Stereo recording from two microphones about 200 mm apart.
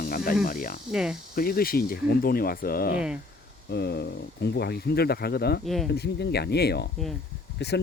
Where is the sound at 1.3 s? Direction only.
50° left (ahead or behind).